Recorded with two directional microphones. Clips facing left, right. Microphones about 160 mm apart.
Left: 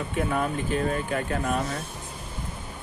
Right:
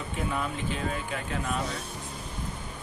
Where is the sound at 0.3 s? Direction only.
50° left (ahead or behind).